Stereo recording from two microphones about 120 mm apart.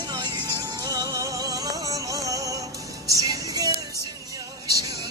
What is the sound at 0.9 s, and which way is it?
Music, 30° right (ahead or behind).